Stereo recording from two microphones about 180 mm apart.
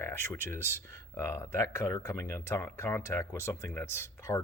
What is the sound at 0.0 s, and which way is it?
Speech, 15° left (ahead or behind).